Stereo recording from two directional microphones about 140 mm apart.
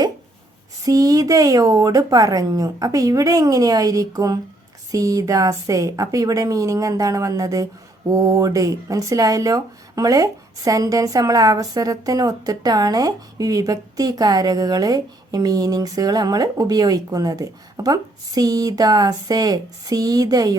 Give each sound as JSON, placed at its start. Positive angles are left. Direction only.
{"t": 0.9, "sound": "speech", "side_deg": -25}